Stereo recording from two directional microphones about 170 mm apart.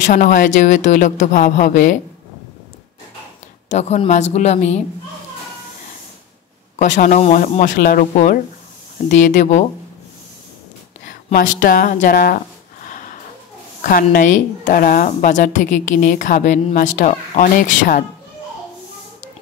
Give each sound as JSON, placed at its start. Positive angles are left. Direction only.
{"t": 0.0, "sound": "a woman's voice", "side_deg": 50}
{"t": 3.6, "sound": "a woman's voice", "side_deg": 40}
{"t": 6.8, "sound": "a woman's voice", "side_deg": 50}
{"t": 9.1, "sound": "a woman's voice", "side_deg": 45}
{"t": 11.1, "sound": "a sound", "side_deg": 50}
{"t": 13.8, "sound": "a woman's voice", "side_deg": 55}